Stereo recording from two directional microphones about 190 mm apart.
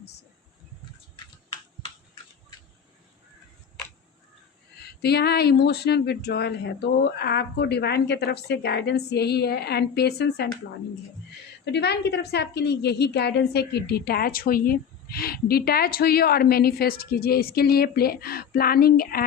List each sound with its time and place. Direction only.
5.0 s speech: 60° left (ahead or behind)
11.6 s a woman's voice: 60° left (ahead or behind)